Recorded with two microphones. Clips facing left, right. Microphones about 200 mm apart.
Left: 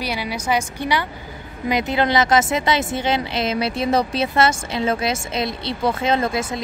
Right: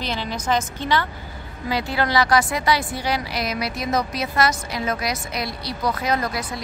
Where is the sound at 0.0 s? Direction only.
10° left (ahead or behind).